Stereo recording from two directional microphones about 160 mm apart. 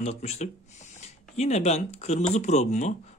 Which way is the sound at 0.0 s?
45° left (ahead or behind).